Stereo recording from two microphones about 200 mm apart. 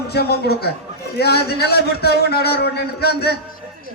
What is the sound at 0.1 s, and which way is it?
A man's voice, 50° left (ahead or behind).